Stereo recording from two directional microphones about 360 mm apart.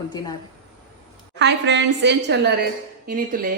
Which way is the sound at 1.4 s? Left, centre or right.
Right.